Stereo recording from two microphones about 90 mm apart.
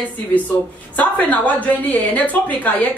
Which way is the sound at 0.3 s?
15° left (ahead or behind).